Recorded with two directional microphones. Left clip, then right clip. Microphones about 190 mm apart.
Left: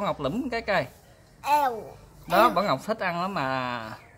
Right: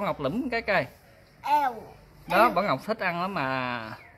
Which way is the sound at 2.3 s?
5° right (ahead or behind).